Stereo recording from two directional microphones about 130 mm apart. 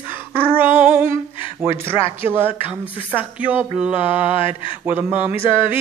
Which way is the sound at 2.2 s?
15° right (ahead or behind).